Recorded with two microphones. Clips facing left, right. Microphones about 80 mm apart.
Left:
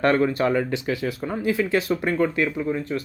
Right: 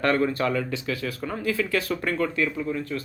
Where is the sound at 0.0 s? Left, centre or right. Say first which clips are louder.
Left 3 dB; left.